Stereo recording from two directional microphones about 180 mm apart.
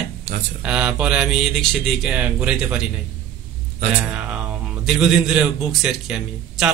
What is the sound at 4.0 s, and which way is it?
Speech, 5° right (ahead or behind).